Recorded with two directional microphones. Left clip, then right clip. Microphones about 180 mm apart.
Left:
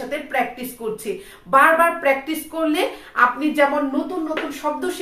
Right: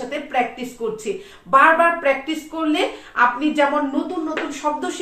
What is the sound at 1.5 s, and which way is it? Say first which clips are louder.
A woman's voice: right 1 dB; 10° left (ahead or behind).